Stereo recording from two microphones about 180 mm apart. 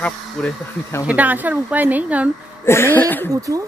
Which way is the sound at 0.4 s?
5° left (ahead or behind).